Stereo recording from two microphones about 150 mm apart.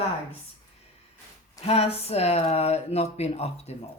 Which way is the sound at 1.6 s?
45° left (ahead or behind).